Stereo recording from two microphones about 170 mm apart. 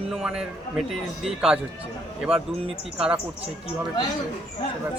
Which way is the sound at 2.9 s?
5° right (ahead or behind).